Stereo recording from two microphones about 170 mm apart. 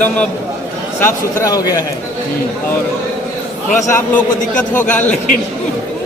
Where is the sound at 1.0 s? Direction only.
15° left (ahead or behind).